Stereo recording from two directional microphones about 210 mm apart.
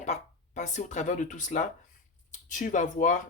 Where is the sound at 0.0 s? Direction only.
35° left (ahead or behind).